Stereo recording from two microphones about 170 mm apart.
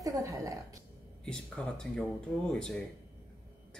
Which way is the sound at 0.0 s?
20° right (ahead or behind).